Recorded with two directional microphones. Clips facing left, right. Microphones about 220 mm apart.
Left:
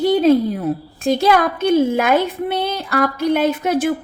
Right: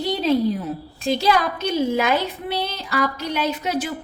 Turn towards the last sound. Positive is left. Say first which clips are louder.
# left 7 dB
turn(degrees=50)  # may be behind; listen again after turning